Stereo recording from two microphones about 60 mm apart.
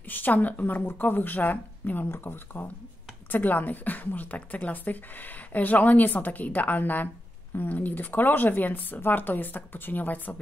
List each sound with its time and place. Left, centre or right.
0.1 s a woman's voice: left